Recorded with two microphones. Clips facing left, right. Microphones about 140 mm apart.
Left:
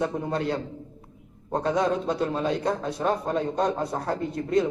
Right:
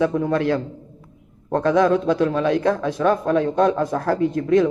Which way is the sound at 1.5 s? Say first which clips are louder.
Right 7 dB; 85° right.